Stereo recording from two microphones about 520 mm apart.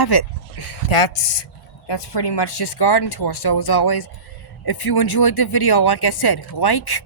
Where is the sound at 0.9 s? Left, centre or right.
Left.